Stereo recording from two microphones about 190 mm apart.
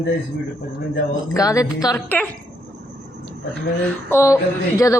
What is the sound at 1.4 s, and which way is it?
Speech, 20° left (ahead or behind).